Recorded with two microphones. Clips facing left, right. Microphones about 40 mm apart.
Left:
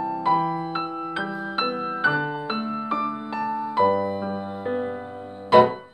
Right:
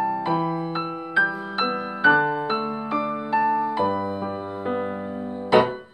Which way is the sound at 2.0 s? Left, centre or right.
Centre.